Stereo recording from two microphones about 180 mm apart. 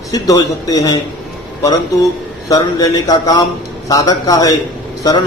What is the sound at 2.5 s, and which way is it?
A man's voice, 20° left (ahead or behind).